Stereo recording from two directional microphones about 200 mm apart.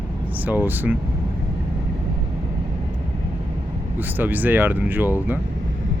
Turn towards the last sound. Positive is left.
turn(degrees=-10)  # may be behind; listen again after turning